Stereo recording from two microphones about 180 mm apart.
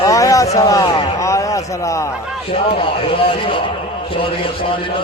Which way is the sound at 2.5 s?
30° left (ahead or behind).